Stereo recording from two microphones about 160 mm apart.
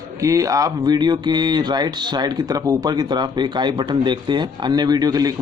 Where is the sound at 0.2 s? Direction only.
20° right (ahead or behind).